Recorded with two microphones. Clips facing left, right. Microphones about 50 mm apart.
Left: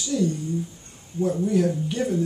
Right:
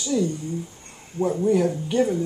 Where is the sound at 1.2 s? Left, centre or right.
Right.